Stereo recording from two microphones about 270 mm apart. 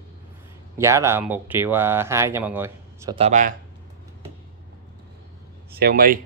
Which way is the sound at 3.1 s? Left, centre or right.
Right.